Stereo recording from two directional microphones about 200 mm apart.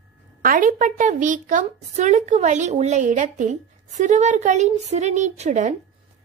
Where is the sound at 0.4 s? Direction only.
45° right (ahead or behind).